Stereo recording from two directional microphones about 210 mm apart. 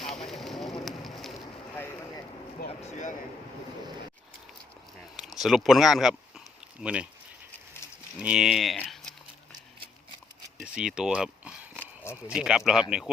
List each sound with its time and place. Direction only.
0.0 s fire: centre (ahead or behind)
1.7 s vehicle: 10° left (ahead or behind)
2.8 s a sound: 35° left (ahead or behind)
5.1 s a sound: centre (ahead or behind)
6.8 s speech: 5° right (ahead or behind)
8.2 s speech: 5° right (ahead or behind)
10.6 s speech: 5° right (ahead or behind)